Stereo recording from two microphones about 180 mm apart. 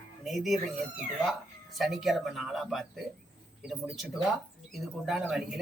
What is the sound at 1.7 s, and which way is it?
Speech, centre (ahead or behind).